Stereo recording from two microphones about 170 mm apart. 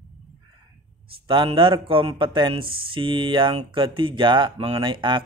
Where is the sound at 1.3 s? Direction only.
30° right (ahead or behind).